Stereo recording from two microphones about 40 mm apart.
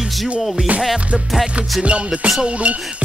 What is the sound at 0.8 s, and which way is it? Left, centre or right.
Music, centre.